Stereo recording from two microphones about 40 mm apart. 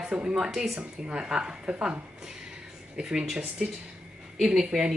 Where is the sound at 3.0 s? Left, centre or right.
Centre.